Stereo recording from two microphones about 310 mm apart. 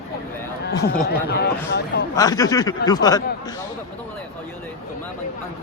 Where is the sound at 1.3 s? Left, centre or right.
Left.